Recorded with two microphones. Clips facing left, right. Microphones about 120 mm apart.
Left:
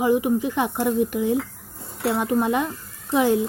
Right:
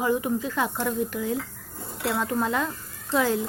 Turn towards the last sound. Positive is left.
turn(degrees=20)  # may be behind; listen again after turning